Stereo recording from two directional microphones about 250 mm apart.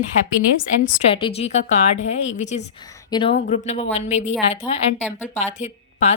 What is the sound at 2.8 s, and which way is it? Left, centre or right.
Speech, centre.